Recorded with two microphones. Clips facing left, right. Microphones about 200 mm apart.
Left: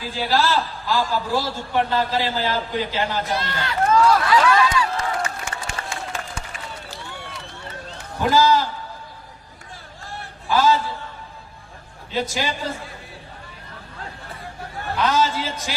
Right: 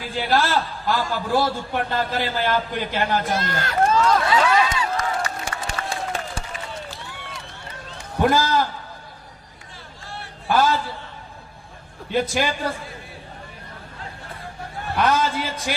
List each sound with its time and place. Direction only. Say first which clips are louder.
0.3 s a man's voice: even; 50° right (ahead or behind)
3.8 s run: left 3 dB; 25° right (ahead or behind)
5.5 s a sound: right 2 dB; 35° right (ahead or behind)
8.2 s a man's voice: left 1 dB; 55° right (ahead or behind)
10.5 s a man's voice: left 1 dB; 55° right (ahead or behind)
12.1 s a man's voice: right 3 dB; 55° right (ahead or behind)
14.9 s a man's voice: even; 55° right (ahead or behind)